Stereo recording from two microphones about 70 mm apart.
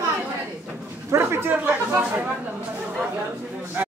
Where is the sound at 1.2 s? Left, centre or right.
Right.